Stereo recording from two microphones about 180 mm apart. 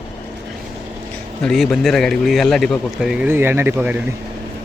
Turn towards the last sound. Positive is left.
turn(degrees=-10)  # may be behind; listen again after turning